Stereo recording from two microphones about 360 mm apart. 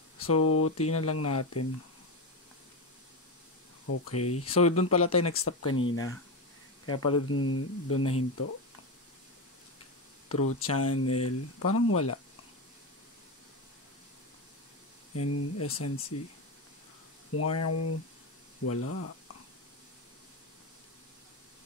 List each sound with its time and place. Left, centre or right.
0.2 s speech: left
3.8 s speech: left
6.9 s speech: left
10.6 s speech: left
15.1 s speech: left
17.3 s speech: left